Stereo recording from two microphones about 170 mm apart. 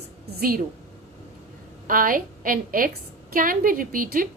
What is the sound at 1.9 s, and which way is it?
A woman's voice, 55° right (ahead or behind).